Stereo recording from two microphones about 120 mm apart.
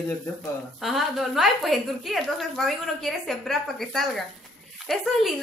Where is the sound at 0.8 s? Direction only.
Centre (ahead or behind).